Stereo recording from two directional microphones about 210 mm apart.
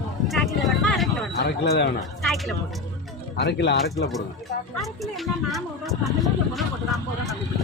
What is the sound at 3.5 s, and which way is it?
Speech, 55° left (ahead or behind).